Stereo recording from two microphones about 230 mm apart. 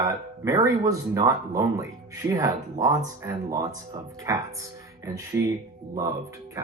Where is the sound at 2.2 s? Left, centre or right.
Right.